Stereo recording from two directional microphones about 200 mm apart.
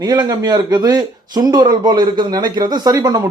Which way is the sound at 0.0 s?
20° right (ahead or behind).